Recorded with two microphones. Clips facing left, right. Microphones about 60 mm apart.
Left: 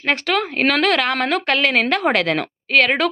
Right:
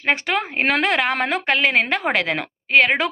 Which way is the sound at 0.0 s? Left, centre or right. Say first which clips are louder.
Left 1 dB; centre.